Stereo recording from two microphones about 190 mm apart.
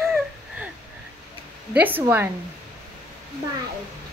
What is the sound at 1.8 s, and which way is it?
Speech, 10° right (ahead or behind).